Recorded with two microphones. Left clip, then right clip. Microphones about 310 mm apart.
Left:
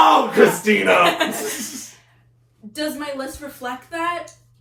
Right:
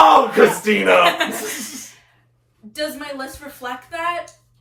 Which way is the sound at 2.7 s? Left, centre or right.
Centre.